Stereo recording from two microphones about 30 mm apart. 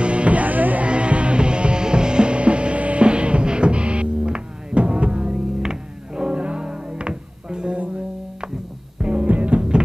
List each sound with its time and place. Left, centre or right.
0.0 s music: right
0.8 s music: right
6.3 s music: right
9.0 s music: right
9.6 s music: right